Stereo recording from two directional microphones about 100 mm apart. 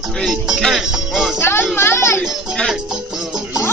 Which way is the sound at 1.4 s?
25° left (ahead or behind).